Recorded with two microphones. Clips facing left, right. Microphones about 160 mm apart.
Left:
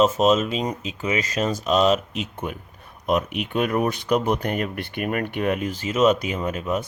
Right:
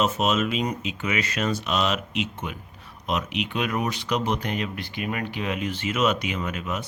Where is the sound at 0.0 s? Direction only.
35° left (ahead or behind).